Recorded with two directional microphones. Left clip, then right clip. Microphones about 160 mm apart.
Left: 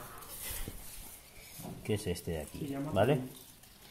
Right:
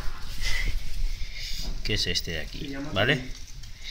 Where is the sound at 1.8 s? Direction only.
Centre (ahead or behind).